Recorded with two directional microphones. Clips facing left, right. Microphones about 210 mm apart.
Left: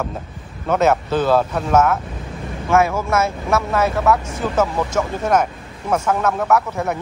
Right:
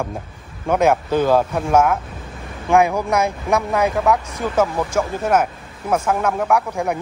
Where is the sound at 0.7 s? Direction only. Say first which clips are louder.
Even; 10° right (ahead or behind).